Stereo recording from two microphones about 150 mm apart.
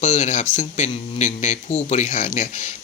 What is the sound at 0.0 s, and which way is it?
Speech, 55° left (ahead or behind).